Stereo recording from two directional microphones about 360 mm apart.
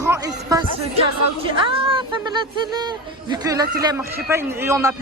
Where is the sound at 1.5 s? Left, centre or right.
Centre.